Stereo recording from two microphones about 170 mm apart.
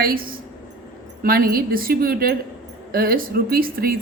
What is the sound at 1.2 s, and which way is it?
Speech, 60° right (ahead or behind).